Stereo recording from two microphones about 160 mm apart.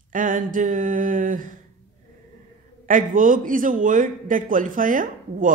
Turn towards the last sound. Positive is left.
turn(degrees=-55)  # may be behind; listen again after turning